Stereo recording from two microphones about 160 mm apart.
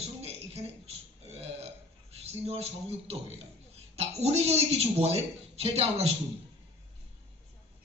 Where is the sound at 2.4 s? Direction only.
40° right (ahead or behind).